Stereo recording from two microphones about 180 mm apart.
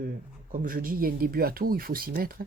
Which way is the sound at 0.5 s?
50° right (ahead or behind).